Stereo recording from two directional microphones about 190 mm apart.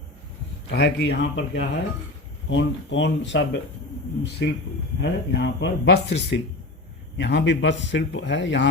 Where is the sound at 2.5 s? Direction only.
75° left (ahead or behind).